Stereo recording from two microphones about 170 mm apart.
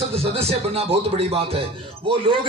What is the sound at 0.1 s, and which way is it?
A man's voice, 35° right (ahead or behind).